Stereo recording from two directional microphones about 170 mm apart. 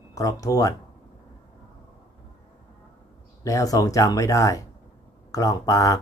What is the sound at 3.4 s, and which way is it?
Speech, 20° left (ahead or behind).